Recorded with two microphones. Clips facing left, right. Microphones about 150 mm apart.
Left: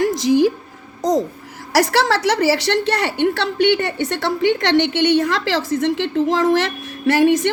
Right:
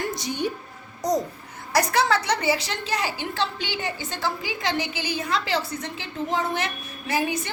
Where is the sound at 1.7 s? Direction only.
90° left.